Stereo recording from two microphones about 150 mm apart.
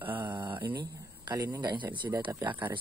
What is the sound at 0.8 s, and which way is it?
Speech, 25° right (ahead or behind).